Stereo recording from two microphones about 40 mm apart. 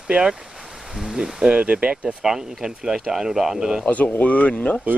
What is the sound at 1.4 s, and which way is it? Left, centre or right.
Speech, right.